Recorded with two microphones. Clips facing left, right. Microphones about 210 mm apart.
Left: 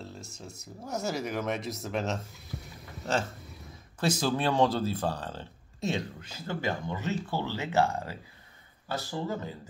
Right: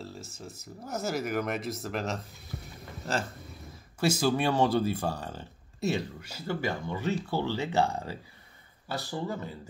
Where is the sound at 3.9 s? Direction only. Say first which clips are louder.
Right 2 dB; 5° right (ahead or behind).